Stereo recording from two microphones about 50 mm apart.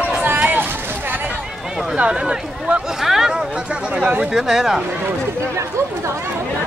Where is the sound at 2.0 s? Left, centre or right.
Centre.